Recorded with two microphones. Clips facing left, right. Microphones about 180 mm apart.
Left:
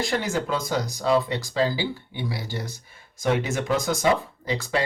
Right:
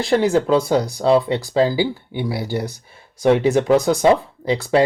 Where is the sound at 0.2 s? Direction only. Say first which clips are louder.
Right 10 dB; 30° right (ahead or behind).